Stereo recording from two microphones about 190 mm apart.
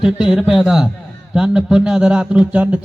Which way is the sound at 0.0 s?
5° right (ahead or behind).